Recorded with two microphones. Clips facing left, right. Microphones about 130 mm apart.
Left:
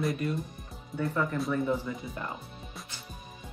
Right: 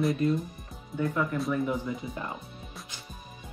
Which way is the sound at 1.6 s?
15° right (ahead or behind).